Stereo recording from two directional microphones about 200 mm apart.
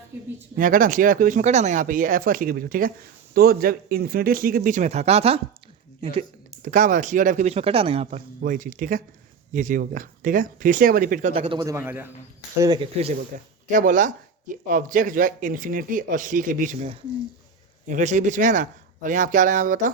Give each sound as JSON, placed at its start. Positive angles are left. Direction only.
{"t": 0.5, "sound": "speech", "side_deg": -45}
{"t": 6.6, "sound": "speech", "side_deg": -40}
{"t": 13.7, "sound": "speech", "side_deg": -40}